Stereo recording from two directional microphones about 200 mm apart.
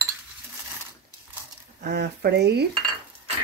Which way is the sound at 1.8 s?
55° right (ahead or behind).